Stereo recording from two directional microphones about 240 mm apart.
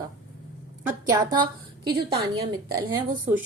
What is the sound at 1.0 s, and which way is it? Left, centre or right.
Speech, centre.